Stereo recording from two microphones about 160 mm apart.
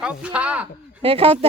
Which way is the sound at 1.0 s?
35° right (ahead or behind).